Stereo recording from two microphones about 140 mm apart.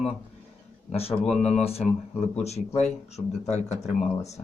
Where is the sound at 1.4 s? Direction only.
50° left (ahead or behind).